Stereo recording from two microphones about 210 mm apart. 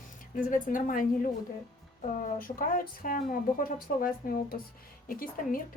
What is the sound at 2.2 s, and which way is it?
A woman's voice, 40° left (ahead or behind).